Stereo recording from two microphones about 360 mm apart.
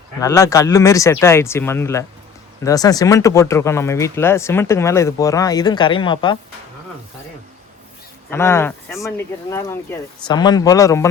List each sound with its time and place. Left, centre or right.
0.2 s speech: centre
8.3 s speech: centre